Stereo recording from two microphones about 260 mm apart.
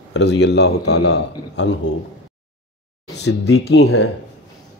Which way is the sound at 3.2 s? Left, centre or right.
Left.